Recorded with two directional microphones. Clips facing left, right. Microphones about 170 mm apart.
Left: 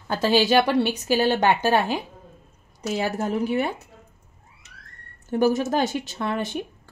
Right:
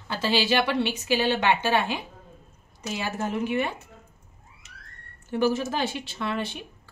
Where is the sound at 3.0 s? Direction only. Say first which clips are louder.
Left 4 dB; 40° left (ahead or behind).